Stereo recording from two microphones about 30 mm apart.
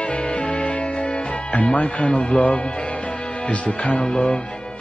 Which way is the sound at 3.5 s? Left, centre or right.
Left.